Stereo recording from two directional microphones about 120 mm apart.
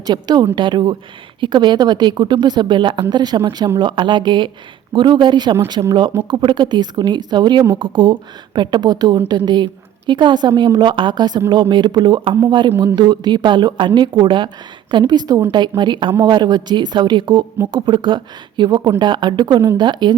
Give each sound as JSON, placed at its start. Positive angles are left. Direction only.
{"t": 0.0, "sound": "a woman's voice", "side_deg": -35}